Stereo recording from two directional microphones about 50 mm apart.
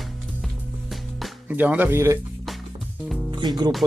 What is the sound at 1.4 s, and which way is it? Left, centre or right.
Speech, right.